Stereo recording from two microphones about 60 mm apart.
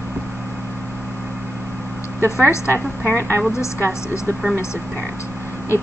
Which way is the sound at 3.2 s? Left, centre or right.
Right.